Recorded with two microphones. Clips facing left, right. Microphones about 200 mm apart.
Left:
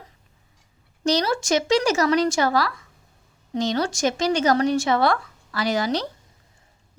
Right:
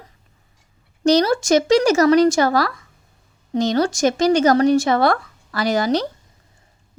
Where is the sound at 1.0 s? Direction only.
45° right (ahead or behind).